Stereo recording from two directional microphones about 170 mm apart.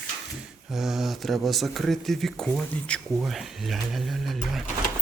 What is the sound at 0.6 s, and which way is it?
Speech, centre (ahead or behind).